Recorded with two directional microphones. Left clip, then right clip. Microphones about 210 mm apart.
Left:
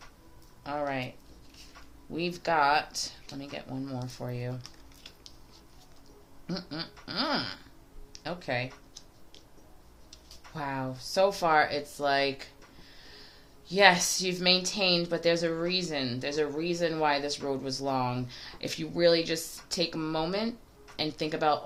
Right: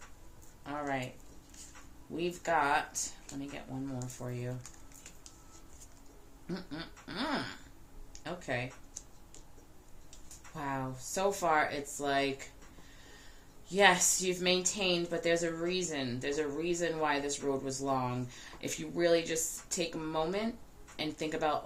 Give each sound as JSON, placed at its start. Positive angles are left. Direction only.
{"t": 0.6, "sound": "a sound", "side_deg": 40}
{"t": 2.1, "sound": "speech", "side_deg": 40}
{"t": 6.5, "sound": "speech", "side_deg": 40}
{"t": 10.5, "sound": "speech", "side_deg": 40}
{"t": 13.7, "sound": "speech", "side_deg": 40}